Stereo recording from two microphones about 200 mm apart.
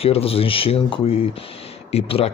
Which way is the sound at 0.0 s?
30° left (ahead or behind).